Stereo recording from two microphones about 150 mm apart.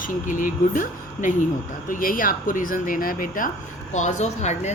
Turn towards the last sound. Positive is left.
turn(degrees=50)  # may be behind; listen again after turning